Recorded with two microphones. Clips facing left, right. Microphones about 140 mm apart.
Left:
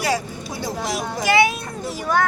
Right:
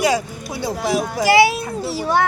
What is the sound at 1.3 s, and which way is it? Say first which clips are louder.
Speech: right 4 dB; 35° right (ahead or behind).